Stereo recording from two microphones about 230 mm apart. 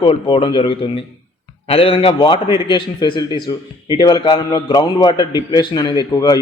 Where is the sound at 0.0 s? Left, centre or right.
Left.